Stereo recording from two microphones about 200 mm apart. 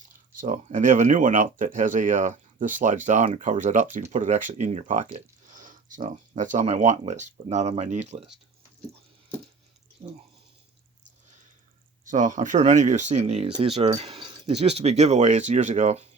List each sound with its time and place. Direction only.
0.3 s speech: 40° right (ahead or behind)
12.0 s speech: 40° right (ahead or behind)